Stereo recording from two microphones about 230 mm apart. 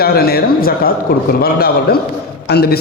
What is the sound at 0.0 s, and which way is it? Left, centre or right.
A man's voice, left.